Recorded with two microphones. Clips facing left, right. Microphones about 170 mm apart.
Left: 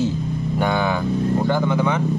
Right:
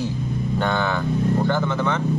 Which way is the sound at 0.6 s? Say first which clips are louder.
Left 3 dB; 10° left (ahead or behind).